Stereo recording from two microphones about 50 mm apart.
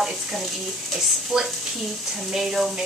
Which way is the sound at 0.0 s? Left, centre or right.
Centre.